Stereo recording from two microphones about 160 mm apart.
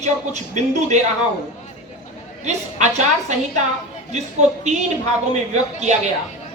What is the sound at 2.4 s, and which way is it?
Speech, 45° right (ahead or behind).